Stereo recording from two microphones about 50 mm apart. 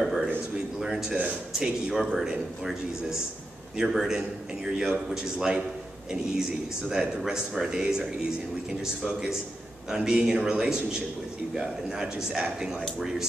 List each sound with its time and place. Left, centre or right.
0.0 s a sound: centre
1.6 s speech: centre
6.9 s speech: centre
9.8 s speech: centre